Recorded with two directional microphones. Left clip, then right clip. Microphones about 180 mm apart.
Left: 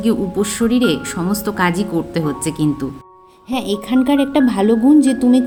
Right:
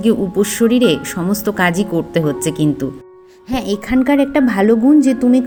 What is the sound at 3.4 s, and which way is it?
Music, 25° right (ahead or behind).